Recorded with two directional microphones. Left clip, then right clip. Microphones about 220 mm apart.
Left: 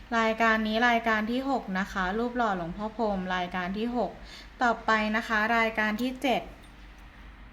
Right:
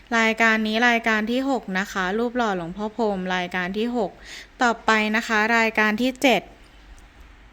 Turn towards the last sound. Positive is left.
turn(degrees=-45)  # may be behind; listen again after turning